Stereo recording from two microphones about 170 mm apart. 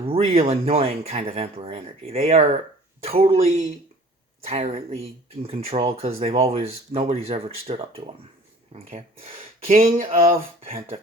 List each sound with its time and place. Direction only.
0.0 s speech: 35° right (ahead or behind)